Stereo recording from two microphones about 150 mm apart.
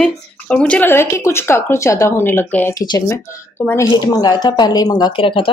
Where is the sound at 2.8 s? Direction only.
30° left (ahead or behind).